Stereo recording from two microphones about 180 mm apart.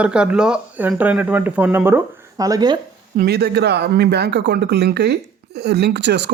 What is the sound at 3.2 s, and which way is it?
Speech, 65° right (ahead or behind).